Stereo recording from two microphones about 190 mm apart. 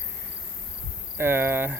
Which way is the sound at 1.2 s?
10° right (ahead or behind).